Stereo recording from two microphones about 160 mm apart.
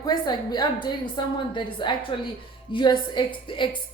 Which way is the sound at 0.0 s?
25° left (ahead or behind).